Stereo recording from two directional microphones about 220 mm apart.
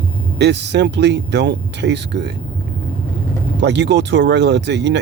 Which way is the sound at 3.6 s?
50° right (ahead or behind).